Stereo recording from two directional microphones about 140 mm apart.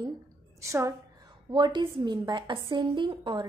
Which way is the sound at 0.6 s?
20° right (ahead or behind).